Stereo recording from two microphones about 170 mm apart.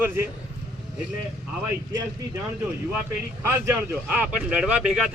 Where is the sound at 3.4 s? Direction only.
15° right (ahead or behind).